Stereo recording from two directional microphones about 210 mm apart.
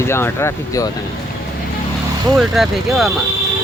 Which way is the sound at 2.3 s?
Centre (ahead or behind).